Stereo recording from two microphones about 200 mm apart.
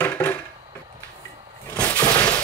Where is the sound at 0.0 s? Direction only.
10° left (ahead or behind).